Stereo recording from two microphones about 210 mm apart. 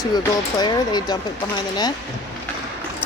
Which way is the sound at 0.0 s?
20° left (ahead or behind).